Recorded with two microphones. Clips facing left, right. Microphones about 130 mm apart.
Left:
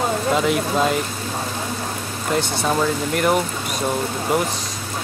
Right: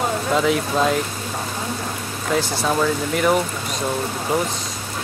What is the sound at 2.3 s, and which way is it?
Speech, centre (ahead or behind).